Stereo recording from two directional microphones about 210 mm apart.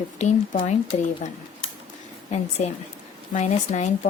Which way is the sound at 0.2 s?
35° left (ahead or behind).